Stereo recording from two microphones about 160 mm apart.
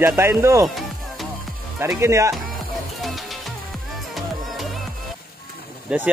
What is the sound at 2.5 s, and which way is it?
Music, centre (ahead or behind).